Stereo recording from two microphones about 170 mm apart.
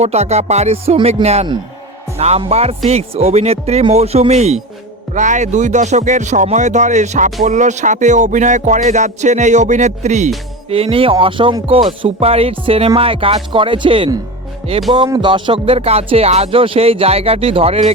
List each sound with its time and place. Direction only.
0.0 s speech: 40° right (ahead or behind)